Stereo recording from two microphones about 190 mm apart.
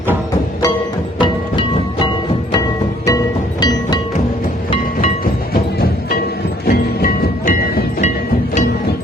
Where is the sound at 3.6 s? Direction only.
20° left (ahead or behind).